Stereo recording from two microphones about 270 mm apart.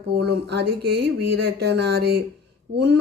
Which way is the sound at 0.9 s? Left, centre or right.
Right.